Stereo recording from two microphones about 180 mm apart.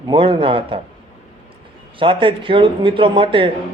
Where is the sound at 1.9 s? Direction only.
30° right (ahead or behind).